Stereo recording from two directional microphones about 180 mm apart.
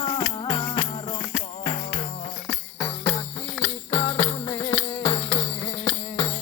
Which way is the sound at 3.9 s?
15° left (ahead or behind).